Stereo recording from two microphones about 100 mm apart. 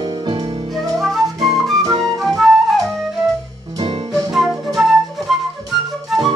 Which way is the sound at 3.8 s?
45° right (ahead or behind).